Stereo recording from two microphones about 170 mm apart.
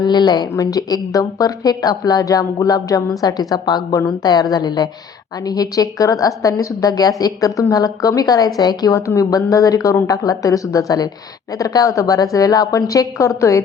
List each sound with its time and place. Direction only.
0.0 s a woman's voice: 25° left (ahead or behind)